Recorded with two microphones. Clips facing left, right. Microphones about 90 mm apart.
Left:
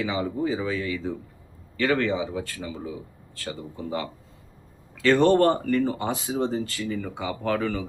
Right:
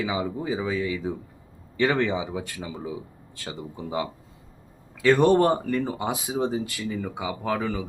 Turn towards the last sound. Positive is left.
turn(degrees=-10)  # may be behind; listen again after turning